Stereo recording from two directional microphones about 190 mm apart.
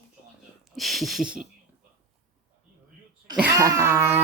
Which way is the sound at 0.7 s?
Centre (ahead or behind).